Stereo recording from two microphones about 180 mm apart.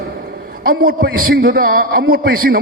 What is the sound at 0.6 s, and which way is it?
A man's voice, 55° right (ahead or behind).